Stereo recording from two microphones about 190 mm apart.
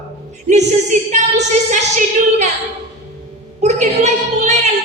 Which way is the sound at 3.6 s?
40° right (ahead or behind).